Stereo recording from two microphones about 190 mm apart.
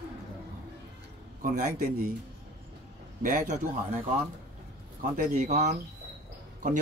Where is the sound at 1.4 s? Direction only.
40° right (ahead or behind).